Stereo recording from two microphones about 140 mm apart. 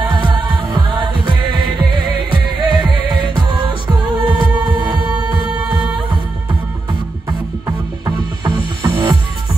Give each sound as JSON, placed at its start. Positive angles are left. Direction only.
{"t": 0.0, "sound": "music", "side_deg": -35}
{"t": 6.9, "sound": "music", "side_deg": -30}